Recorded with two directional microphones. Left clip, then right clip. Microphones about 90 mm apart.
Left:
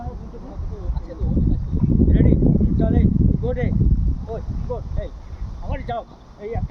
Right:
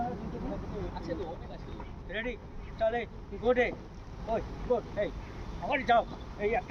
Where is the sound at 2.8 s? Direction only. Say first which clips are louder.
Left 2 dB; 10° left (ahead or behind).